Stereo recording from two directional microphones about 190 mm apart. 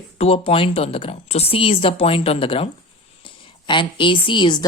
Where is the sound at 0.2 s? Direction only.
30° left (ahead or behind).